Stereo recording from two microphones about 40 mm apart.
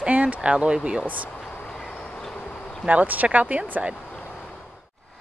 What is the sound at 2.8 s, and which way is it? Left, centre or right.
Speech, right.